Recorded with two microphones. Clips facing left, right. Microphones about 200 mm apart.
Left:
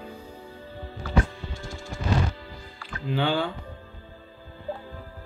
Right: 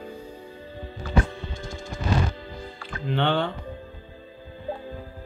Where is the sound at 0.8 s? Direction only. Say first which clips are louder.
Right 1 dB; 20° right (ahead or behind).